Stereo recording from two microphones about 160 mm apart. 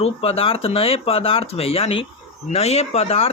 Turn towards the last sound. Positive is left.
turn(degrees=40)  # may be behind; listen again after turning